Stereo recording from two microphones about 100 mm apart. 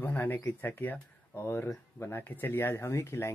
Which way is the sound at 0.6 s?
20° left (ahead or behind).